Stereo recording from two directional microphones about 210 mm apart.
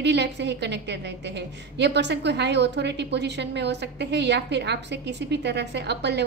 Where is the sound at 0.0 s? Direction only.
55° right (ahead or behind).